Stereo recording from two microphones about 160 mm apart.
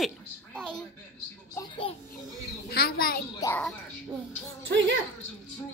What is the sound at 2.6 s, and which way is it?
Speech, 70° left (ahead or behind).